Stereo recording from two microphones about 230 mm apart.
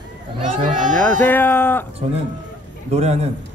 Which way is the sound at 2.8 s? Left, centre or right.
Right.